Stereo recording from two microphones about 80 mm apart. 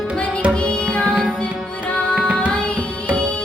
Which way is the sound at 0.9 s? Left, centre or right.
Centre.